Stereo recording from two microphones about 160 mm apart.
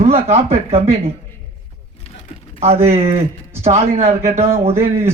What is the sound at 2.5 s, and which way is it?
Speech, 40° right (ahead or behind).